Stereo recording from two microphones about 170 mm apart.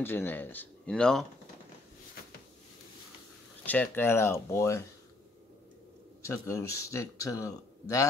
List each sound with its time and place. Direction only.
0.0 s speech: 10° left (ahead or behind)
3.6 s speech: 10° left (ahead or behind)
6.2 s speech: 15° left (ahead or behind)